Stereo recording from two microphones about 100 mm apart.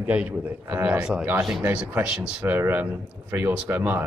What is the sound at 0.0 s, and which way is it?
A man's voice, 15° right (ahead or behind).